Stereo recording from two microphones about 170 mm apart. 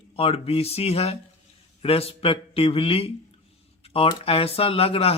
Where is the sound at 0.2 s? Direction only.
35° left (ahead or behind).